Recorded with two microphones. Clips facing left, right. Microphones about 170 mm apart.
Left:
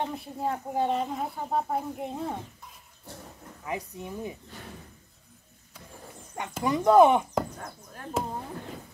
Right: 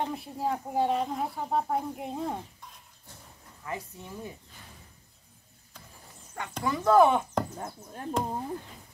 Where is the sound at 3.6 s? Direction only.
15° left (ahead or behind).